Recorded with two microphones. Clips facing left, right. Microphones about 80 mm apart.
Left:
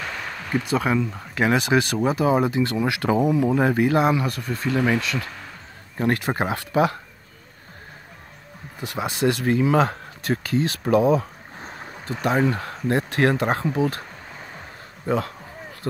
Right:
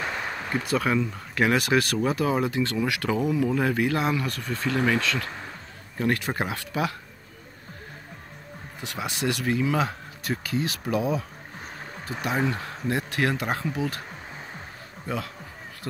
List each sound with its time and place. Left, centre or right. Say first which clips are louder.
0.0 s a sound: right 1 dB; centre
0.7 s speech: left 1 dB; centre
2.0 s speech: left 4 dB; left
5.9 s speech: left 3 dB; left
8.8 s speech: left 6 dB; left
15.0 s speech: left 8 dB; left